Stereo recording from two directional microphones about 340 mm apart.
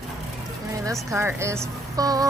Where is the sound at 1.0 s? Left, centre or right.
Centre.